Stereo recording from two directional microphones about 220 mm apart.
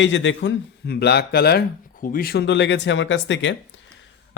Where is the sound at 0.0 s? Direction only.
55° left (ahead or behind).